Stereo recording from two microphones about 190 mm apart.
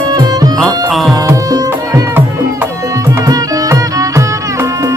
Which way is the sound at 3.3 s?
15° right (ahead or behind).